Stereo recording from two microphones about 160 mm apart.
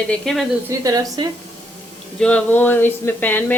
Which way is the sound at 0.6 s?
20° right (ahead or behind).